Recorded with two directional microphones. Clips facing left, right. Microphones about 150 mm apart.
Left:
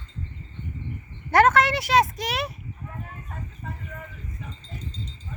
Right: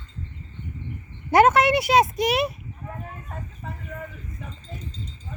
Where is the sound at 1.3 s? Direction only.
10° right (ahead or behind).